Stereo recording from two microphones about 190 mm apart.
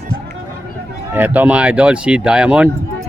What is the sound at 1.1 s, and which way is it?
Speech, 10° right (ahead or behind).